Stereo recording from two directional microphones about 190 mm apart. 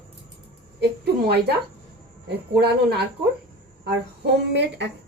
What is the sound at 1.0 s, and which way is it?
Speech, 60° right (ahead or behind).